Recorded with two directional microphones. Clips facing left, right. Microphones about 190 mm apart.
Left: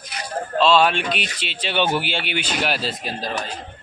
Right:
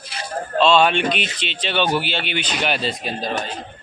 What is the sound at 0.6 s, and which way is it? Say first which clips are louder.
A man's voice: right 1 dB; 5° left (ahead or behind).